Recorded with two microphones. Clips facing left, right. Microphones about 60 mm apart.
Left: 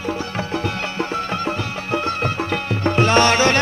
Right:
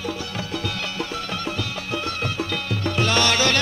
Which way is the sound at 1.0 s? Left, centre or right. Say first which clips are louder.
Left 6 dB; left.